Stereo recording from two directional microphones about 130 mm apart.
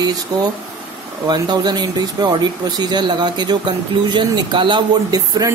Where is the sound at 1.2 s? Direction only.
30° right (ahead or behind).